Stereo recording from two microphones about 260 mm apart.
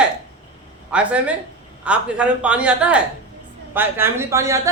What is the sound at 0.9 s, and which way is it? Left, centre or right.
A man's voice, centre.